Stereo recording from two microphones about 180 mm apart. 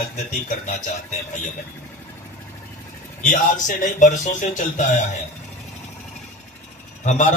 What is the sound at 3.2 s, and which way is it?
Speech, 45° left (ahead or behind).